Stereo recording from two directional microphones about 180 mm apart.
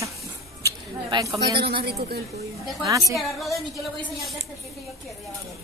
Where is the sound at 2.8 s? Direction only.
20° right (ahead or behind).